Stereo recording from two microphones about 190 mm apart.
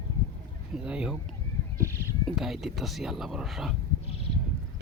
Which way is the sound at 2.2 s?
Centre (ahead or behind).